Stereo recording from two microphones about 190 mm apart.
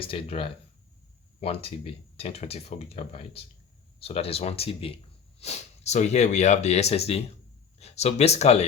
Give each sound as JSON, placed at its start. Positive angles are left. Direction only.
{"t": 0.0, "sound": "speech", "side_deg": 30}